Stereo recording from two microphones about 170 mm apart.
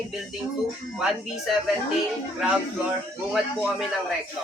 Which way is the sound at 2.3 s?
5° right (ahead or behind).